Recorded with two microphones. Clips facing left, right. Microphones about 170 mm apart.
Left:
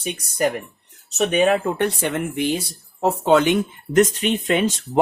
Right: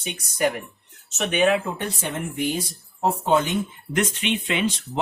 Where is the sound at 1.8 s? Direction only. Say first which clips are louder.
Left 7 dB; 75° left (ahead or behind).